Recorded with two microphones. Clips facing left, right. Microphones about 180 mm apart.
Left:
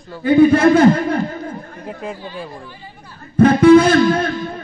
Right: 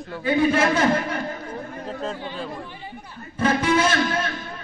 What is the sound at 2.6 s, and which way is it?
Speech, 20° right (ahead or behind).